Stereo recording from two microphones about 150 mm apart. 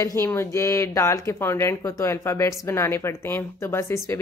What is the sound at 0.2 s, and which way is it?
Speech, 15° left (ahead or behind).